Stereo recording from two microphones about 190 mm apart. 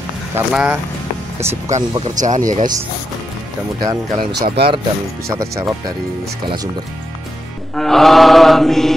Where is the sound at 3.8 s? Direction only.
20° right (ahead or behind).